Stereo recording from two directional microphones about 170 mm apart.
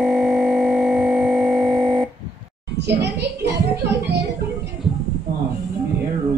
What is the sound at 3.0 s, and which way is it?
Speech, 80° right.